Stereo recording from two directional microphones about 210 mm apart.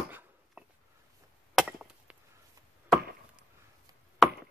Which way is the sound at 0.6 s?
5° right (ahead or behind).